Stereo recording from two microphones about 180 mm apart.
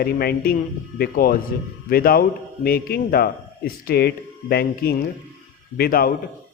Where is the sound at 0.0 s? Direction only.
60° left (ahead or behind).